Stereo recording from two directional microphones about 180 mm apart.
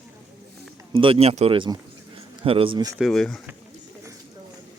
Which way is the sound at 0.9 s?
30° right (ahead or behind).